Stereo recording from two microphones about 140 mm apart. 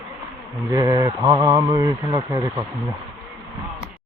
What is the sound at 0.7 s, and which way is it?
Speech, 25° right (ahead or behind).